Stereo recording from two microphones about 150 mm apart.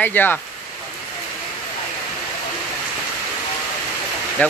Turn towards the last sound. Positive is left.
turn(degrees=10)  # may be behind; listen again after turning